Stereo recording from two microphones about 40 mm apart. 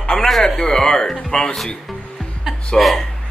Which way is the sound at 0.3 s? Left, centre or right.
Centre.